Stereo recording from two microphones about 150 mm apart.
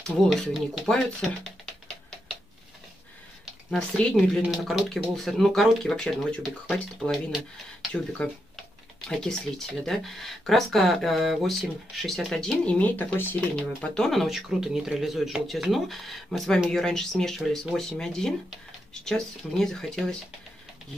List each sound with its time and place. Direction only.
0.0 s speech: centre (ahead or behind)
3.7 s speech: 5° left (ahead or behind)
9.2 s speech: 5° left (ahead or behind)